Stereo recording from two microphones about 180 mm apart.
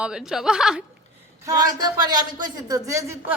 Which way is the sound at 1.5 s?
20° right (ahead or behind).